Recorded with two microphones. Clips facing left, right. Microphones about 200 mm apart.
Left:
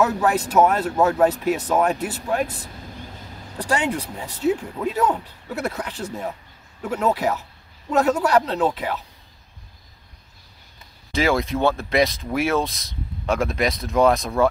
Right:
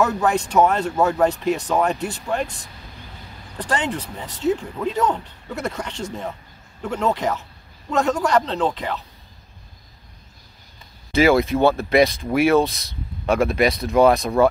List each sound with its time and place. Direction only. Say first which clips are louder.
0.0 s speech: even; 5° left (ahead or behind)
11.1 s speech: right 5 dB; centre (ahead or behind)